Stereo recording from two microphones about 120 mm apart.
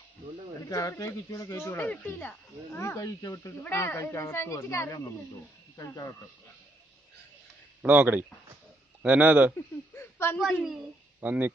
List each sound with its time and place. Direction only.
0.6 s speech: 30° left (ahead or behind)
7.8 s speech: 15° right (ahead or behind)
9.9 s a sound: 20° left (ahead or behind)
10.4 s a woman's voice: centre (ahead or behind)
11.1 s speech: 15° right (ahead or behind)